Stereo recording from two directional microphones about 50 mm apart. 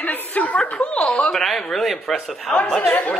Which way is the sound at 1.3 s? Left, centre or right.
Centre.